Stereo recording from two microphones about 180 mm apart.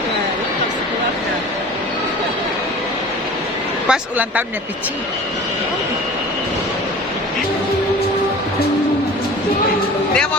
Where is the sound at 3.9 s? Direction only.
10° right (ahead or behind).